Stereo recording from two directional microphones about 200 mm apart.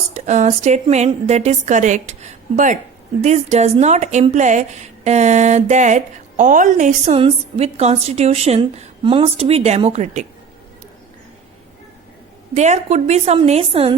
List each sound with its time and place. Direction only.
0.1 s a woman's voice: 35° right (ahead or behind)
3.2 s a woman's voice: 35° right (ahead or behind)
12.5 s a woman's voice: 35° right (ahead or behind)